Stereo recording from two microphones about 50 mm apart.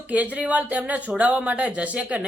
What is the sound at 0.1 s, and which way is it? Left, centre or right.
A woman's voice, right.